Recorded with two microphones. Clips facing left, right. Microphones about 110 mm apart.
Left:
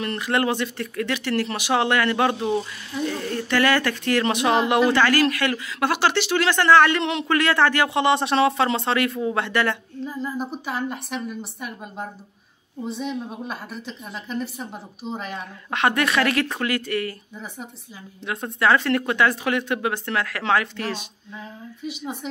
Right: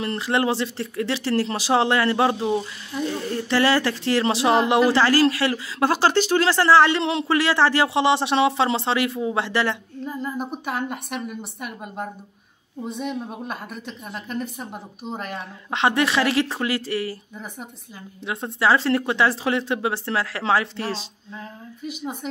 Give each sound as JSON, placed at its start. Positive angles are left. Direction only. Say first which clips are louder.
{"t": 0.0, "sound": "speech", "louder": "right 1 dB", "side_deg": -25}
{"t": 10.1, "sound": "a woman's voice", "louder": "even", "side_deg": -5}
{"t": 15.7, "sound": "speech", "louder": "right 1 dB", "side_deg": -25}
{"t": 18.2, "sound": "speech", "louder": "even", "side_deg": -25}